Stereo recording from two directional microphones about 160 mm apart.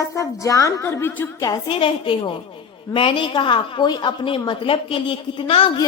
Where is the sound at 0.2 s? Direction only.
20° left (ahead or behind).